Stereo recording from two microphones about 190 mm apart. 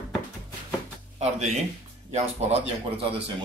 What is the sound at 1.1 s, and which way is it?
A man's voice, 35° right (ahead or behind).